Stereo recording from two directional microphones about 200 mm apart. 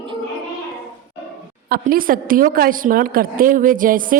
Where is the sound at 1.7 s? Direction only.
45° right (ahead or behind).